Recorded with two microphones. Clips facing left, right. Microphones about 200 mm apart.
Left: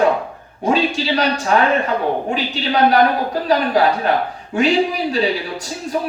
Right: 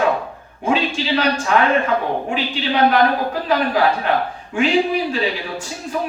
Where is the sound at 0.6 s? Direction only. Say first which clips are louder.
Left 2 dB; 40° left (ahead or behind).